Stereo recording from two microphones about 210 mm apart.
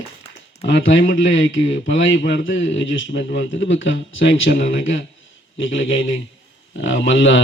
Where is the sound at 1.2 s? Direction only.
60° left (ahead or behind).